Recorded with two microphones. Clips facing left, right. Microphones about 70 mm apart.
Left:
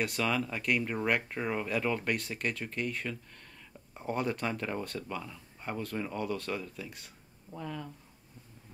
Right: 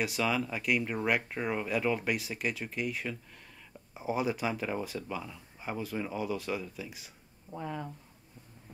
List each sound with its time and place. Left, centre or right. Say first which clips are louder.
0.0 s speech: right 1 dB; centre
7.5 s speech: right 2 dB; right